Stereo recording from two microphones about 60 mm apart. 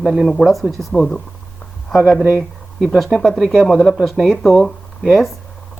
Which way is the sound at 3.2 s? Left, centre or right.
Centre.